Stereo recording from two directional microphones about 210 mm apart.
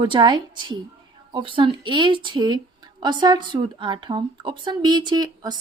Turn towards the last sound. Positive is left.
turn(degrees=-20)  # may be behind; listen again after turning